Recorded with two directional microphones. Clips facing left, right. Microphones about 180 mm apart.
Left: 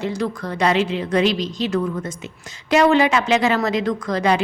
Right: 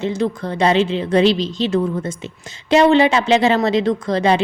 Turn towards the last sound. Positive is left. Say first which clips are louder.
# right 3 dB
turn(degrees=-25)  # may be behind; listen again after turning